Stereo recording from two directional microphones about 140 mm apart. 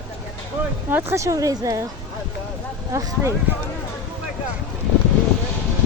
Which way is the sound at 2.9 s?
20° right (ahead or behind).